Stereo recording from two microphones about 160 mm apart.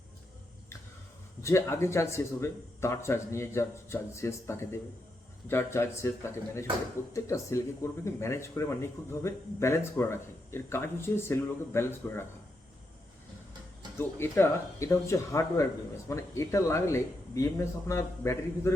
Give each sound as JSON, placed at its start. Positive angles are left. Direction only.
{"t": 1.4, "sound": "speech", "side_deg": 20}
{"t": 14.0, "sound": "speech", "side_deg": 15}